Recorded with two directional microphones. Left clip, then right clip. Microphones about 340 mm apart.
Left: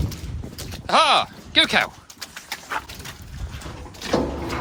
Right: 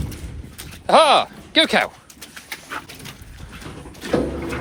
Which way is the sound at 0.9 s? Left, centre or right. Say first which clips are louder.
Right 4 dB; centre.